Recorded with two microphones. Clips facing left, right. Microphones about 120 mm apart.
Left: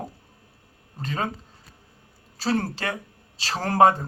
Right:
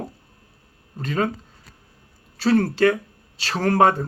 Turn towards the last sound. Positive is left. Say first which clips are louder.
# right 1 dB
turn(degrees=30)  # may be behind; listen again after turning